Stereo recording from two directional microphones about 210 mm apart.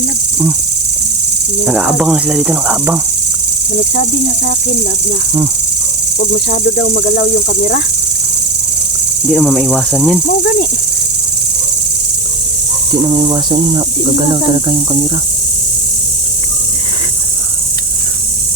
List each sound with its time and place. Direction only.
1.6 s speech: 5° right (ahead or behind)
6.8 s speech: 35° left (ahead or behind)
9.3 s speech: 5° left (ahead or behind)
12.9 s speech: 20° right (ahead or behind)